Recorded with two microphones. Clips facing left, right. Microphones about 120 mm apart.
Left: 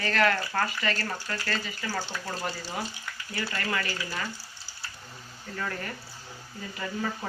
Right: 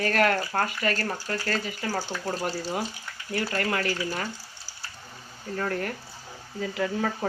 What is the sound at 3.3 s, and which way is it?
Speech, 50° right (ahead or behind).